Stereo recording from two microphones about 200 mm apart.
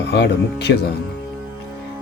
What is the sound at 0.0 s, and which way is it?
Speech, 55° left (ahead or behind).